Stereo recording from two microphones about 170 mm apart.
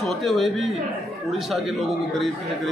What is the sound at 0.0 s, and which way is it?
A man's voice, centre (ahead or behind).